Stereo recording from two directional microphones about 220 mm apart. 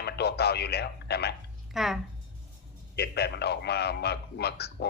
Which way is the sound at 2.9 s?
50° left (ahead or behind).